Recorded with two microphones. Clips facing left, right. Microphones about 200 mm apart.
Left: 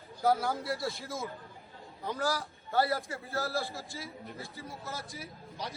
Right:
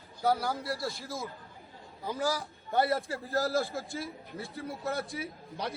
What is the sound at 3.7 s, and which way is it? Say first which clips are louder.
Speech: right 6 dB; 55° right (ahead or behind).